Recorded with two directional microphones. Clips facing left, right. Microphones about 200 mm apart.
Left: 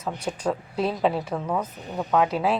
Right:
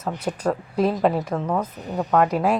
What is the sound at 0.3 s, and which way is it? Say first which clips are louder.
Speech: right 3 dB; 10° right (ahead or behind).